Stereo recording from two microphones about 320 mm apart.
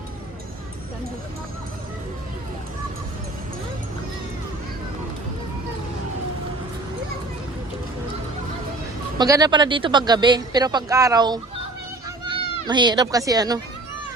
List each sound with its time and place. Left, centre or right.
9.1 s speech: centre